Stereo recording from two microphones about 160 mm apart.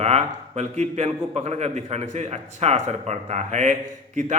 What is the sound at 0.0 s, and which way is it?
A man's voice, 45° right (ahead or behind).